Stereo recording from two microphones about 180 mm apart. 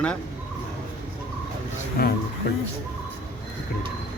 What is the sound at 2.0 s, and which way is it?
Speech, 60° left (ahead or behind).